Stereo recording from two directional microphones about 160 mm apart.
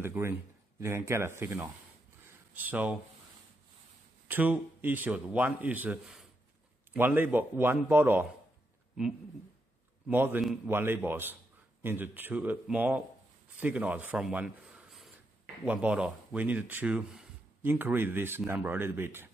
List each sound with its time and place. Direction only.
0.0 s speech: 15° right (ahead or behind)
4.3 s speech: 10° right (ahead or behind)
10.0 s speech: 10° right (ahead or behind)